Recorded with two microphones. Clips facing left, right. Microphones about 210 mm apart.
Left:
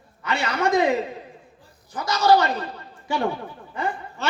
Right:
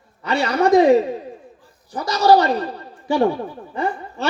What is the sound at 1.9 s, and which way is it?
Speech, 35° right (ahead or behind).